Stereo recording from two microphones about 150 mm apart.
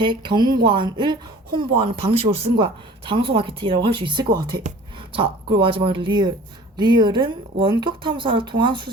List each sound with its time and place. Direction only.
0.0 s speech: 30° right (ahead or behind)